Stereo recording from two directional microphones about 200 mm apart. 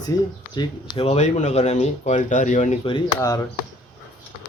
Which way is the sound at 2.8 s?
20° left (ahead or behind).